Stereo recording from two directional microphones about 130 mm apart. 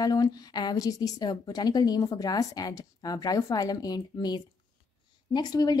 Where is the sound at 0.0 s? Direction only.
30° left (ahead or behind).